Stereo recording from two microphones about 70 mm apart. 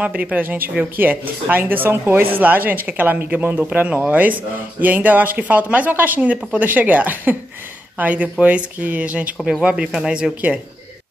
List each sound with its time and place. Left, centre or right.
0.0 s speech: right
9.4 s speech: centre